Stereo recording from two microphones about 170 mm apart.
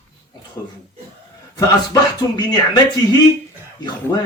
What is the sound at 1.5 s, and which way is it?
Speech, 25° left (ahead or behind).